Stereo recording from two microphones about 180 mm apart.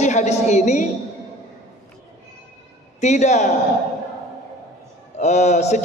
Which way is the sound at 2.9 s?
40° left (ahead or behind).